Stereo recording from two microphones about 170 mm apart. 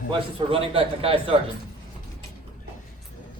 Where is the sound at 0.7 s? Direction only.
35° right (ahead or behind).